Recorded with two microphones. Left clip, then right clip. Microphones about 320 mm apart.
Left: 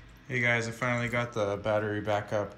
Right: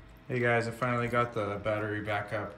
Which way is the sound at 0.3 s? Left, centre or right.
Centre.